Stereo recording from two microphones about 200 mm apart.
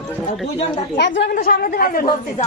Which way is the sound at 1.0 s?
60° left (ahead or behind).